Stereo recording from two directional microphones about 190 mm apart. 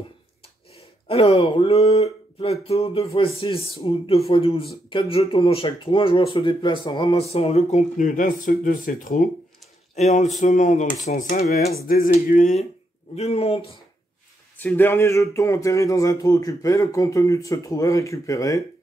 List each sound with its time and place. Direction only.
1.0 s speech: 30° left (ahead or behind); by 9.3 s 45° left (ahead or behind)
9.9 s speech: 35° left (ahead or behind)
11.7 s a sound: 50° left (ahead or behind)
13.1 s speech: 35° left (ahead or behind)
14.6 s speech: 10° left (ahead or behind)